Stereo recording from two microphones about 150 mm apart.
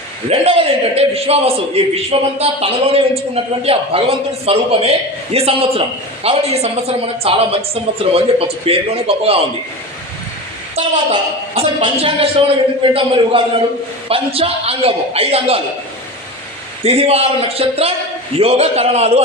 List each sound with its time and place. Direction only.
0.3 s a woman's voice: 45° right (ahead or behind)
10.8 s a woman's voice: 35° right (ahead or behind)
16.8 s speech: 45° right (ahead or behind)